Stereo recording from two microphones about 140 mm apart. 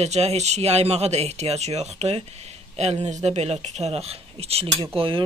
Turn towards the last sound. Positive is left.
turn(degrees=-40)  # may be behind; listen again after turning